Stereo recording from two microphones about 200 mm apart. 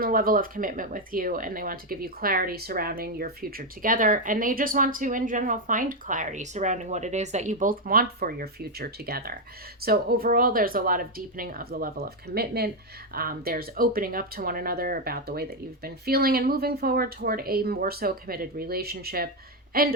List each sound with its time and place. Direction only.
0.0 s speech: 45° right (ahead or behind)